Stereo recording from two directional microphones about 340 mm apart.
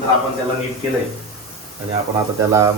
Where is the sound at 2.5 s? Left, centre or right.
Centre.